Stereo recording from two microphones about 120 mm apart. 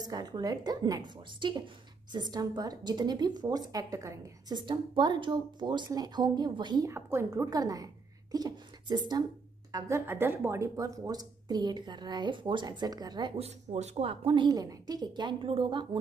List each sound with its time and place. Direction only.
0.0 s a woman's voice: 35° right (ahead or behind)
6.9 s a woman's voice: 20° right (ahead or behind)
7.4 s a woman's voice: 30° right (ahead or behind)
9.7 s a woman's voice: 30° right (ahead or behind)
13.4 s speech: 65° right (ahead or behind); by 14.5 s 45° right (ahead or behind)
14.5 s a woman's voice: 30° right (ahead or behind)